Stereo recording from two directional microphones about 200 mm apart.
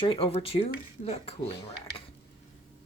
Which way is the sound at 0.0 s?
25° left (ahead or behind).